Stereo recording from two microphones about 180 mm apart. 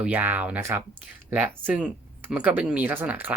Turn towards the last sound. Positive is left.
turn(degrees=-10)  # may be behind; listen again after turning